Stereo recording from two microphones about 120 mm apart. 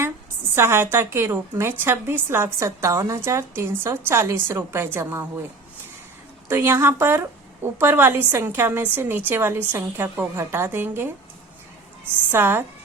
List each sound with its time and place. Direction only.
0.5 s a woman's voice: 20° right (ahead or behind)
6.5 s a woman's voice: 20° right (ahead or behind)
12.3 s a woman's voice: 20° right (ahead or behind)